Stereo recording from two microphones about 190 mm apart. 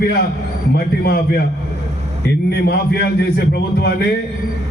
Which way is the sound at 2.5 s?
55° left (ahead or behind).